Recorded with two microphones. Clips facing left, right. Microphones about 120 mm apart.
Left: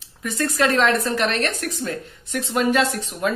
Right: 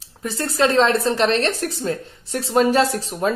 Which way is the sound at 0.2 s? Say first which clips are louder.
Right 1 dB; 30° right (ahead or behind).